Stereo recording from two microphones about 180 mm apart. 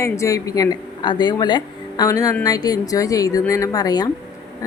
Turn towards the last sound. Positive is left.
turn(degrees=20)  # may be behind; listen again after turning